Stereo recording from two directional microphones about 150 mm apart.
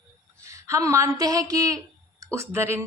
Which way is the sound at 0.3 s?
20° right (ahead or behind).